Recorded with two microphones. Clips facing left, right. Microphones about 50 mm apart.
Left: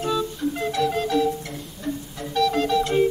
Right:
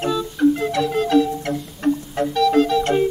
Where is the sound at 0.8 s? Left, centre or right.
Centre.